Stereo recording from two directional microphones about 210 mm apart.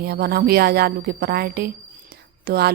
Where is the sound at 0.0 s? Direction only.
50° right (ahead or behind).